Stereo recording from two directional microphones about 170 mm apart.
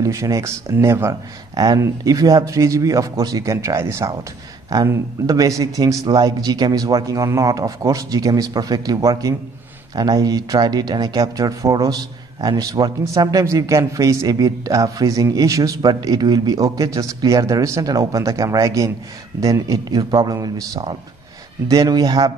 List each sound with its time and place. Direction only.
0.0 s speech: 20° right (ahead or behind)